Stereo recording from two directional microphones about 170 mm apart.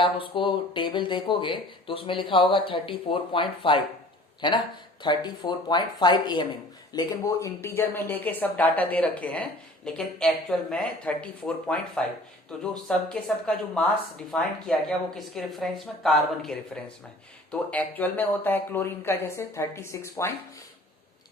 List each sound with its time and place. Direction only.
0.0 s speech: 30° left (ahead or behind)